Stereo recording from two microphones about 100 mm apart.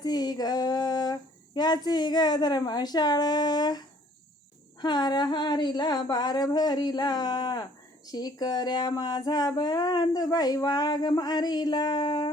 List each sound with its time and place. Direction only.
0.0 s speech: 45° left (ahead or behind)